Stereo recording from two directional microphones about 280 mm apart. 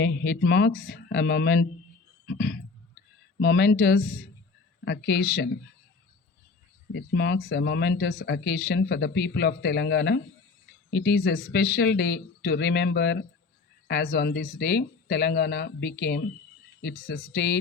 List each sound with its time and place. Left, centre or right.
0.0 s speech: left
2.2 s a sound: left
3.4 s speech: left
6.9 s speech: left